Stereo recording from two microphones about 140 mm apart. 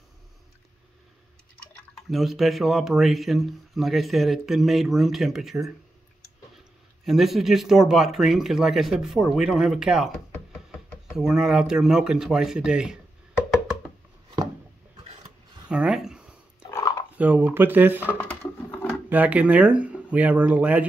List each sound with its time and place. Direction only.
2.0 s a man's voice: centre (ahead or behind)
7.1 s a man's voice: centre (ahead or behind)
11.1 s a man's voice: 5° right (ahead or behind)
15.7 s a sound: 5° right (ahead or behind)
16.7 s dog: 25° left (ahead or behind)
17.2 s speech: 10° right (ahead or behind)
18.0 s a sound: 15° left (ahead or behind)
19.0 s speech: 10° right (ahead or behind)